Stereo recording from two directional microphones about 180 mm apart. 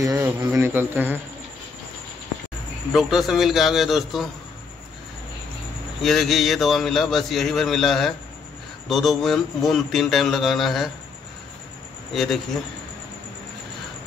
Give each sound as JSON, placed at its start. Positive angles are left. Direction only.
{"t": 0.0, "sound": "a man's voice", "side_deg": -20}
{"t": 2.9, "sound": "a man's voice", "side_deg": 0}
{"t": 5.9, "sound": "a man's voice", "side_deg": 0}
{"t": 12.1, "sound": "speech", "side_deg": 0}